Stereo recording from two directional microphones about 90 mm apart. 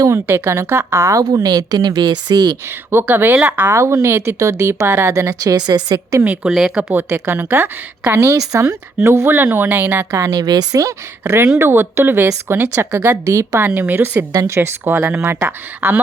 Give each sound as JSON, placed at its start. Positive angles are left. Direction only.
{"t": 0.0, "sound": "a woman's voice", "side_deg": -30}
{"t": 2.9, "sound": "a woman's voice", "side_deg": -25}
{"t": 3.7, "sound": "a woman's voice", "side_deg": -30}
{"t": 6.2, "sound": "speech", "side_deg": -15}
{"t": 6.5, "sound": "speech", "side_deg": -5}
{"t": 7.1, "sound": "a woman's voice", "side_deg": -25}
{"t": 10.3, "sound": "a woman's voice", "side_deg": -50}
{"t": 13.7, "sound": "a woman's voice", "side_deg": -25}